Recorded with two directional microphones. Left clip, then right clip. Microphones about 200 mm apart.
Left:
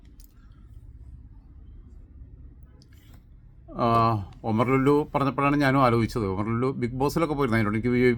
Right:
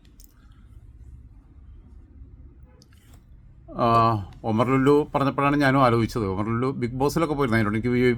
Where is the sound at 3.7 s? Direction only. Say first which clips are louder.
Right 3 dB; 5° right (ahead or behind).